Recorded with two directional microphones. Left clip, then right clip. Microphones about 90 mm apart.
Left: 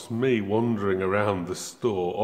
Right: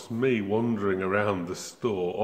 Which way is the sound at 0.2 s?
35° left (ahead or behind).